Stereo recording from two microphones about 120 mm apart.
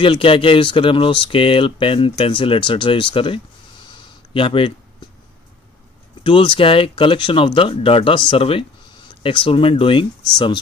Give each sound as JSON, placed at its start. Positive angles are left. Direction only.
{"t": 0.0, "sound": "speech", "side_deg": 45}
{"t": 3.9, "sound": "a sound", "side_deg": 45}
{"t": 6.2, "sound": "speech", "side_deg": 45}